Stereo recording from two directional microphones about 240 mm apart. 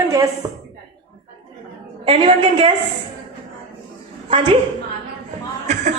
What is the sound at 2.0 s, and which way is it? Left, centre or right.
Speech, right.